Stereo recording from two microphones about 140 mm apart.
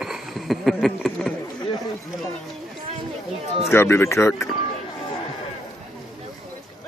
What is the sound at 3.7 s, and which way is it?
Speech, 15° left (ahead or behind).